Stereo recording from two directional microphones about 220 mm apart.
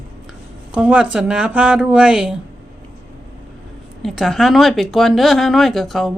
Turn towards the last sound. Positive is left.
turn(degrees=0)  # may be behind; listen again after turning